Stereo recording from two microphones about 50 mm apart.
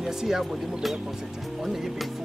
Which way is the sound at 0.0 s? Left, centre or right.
Centre.